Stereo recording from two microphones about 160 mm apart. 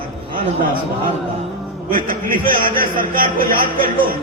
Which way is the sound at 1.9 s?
60° right (ahead or behind).